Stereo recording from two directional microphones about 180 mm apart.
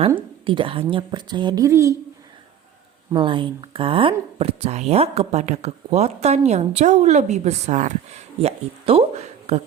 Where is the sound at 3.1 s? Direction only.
30° right (ahead or behind).